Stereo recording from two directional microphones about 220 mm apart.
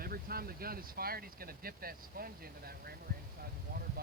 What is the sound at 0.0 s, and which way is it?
Speech, 45° right (ahead or behind).